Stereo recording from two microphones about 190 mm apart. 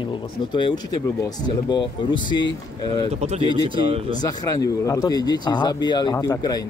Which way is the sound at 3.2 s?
35° right (ahead or behind).